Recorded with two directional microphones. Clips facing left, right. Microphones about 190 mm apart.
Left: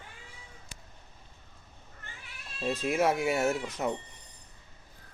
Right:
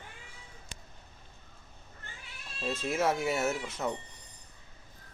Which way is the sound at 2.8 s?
15° left (ahead or behind).